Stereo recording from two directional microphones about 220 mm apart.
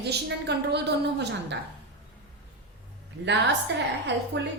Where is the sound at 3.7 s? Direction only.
55° right (ahead or behind).